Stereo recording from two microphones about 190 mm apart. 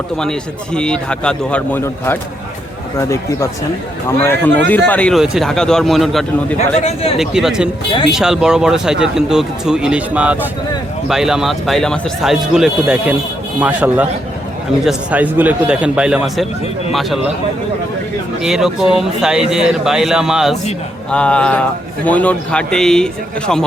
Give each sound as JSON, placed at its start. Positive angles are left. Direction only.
{"t": 0.2, "sound": "speech", "side_deg": 5}
{"t": 4.2, "sound": "a man's voice", "side_deg": 10}
{"t": 6.6, "sound": "a man's voice", "side_deg": 35}
{"t": 7.2, "sound": "speech", "side_deg": 0}
{"t": 18.4, "sound": "speech", "side_deg": -5}